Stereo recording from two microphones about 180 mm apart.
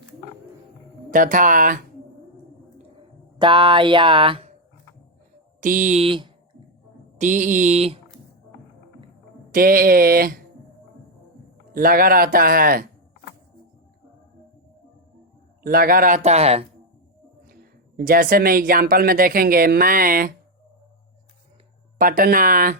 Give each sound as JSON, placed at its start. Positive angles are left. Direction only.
{"t": 1.1, "sound": "speech", "side_deg": -50}
{"t": 3.3, "sound": "speech", "side_deg": -25}
{"t": 5.5, "sound": "speech", "side_deg": -45}
{"t": 7.2, "sound": "mantra", "side_deg": -45}
{"t": 9.5, "sound": "speech", "side_deg": -55}
{"t": 11.7, "sound": "speech", "side_deg": -55}
{"t": 15.6, "sound": "speech", "side_deg": -55}
{"t": 17.5, "sound": "speech", "side_deg": -55}
{"t": 21.9, "sound": "speech", "side_deg": -50}